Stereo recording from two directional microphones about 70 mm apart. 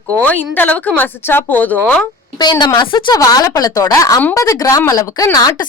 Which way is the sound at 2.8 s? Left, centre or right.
Left.